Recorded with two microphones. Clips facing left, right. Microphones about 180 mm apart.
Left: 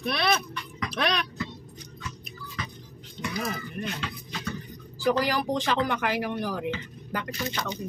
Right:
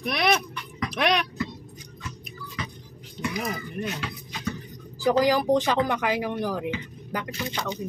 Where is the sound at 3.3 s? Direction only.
15° right (ahead or behind).